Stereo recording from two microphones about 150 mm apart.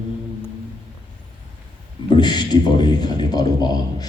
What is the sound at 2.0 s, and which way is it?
A man's voice, 30° left (ahead or behind).